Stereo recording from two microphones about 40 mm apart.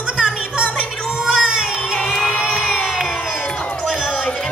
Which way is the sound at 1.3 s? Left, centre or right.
Centre.